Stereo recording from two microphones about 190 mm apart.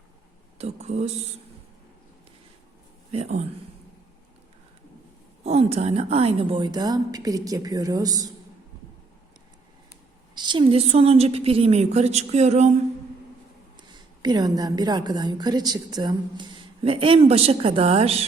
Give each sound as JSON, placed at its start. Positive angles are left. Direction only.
{"t": 0.6, "sound": "speech", "side_deg": -35}
{"t": 3.1, "sound": "a woman's voice", "side_deg": -35}
{"t": 5.4, "sound": "a woman's voice", "side_deg": -35}
{"t": 10.3, "sound": "a woman's voice", "side_deg": -25}
{"t": 14.2, "sound": "a woman's voice", "side_deg": -20}